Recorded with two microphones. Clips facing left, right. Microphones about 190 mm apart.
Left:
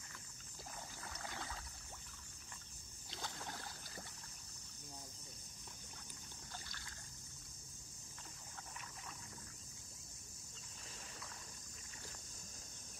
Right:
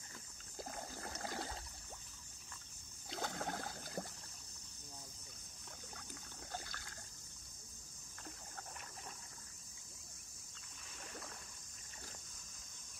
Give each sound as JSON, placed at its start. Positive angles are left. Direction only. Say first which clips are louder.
{"t": 0.6, "sound": "a sound", "louder": "right 6 dB", "side_deg": -50}
{"t": 3.2, "sound": "boat", "louder": "right 7 dB", "side_deg": -55}
{"t": 6.5, "sound": "boat", "louder": "right 7 dB", "side_deg": -50}